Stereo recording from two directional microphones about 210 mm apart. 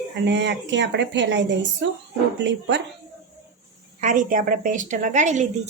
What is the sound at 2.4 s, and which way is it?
Speech, 55° right (ahead or behind).